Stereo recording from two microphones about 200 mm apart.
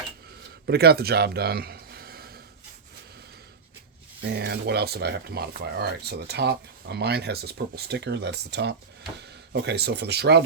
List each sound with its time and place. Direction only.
0.7 s speech: 50° right (ahead or behind)
4.2 s speech: 55° right (ahead or behind)